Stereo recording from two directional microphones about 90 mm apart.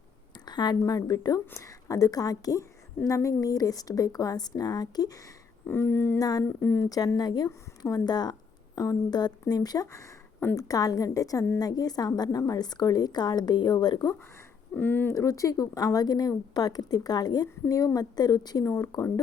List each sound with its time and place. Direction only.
0.4 s a woman's voice: 55° left (ahead or behind)
5.6 s speech: 25° left (ahead or behind)
6.1 s a woman's voice: 45° left (ahead or behind)
6.6 s speech: 25° left (ahead or behind)
6.8 s a woman's voice: 45° left (ahead or behind)
14.8 s speech: 20° left (ahead or behind)
15.1 s a woman's voice: 35° left (ahead or behind)